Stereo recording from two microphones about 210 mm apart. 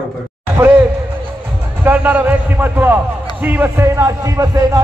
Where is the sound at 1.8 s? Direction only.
10° right (ahead or behind).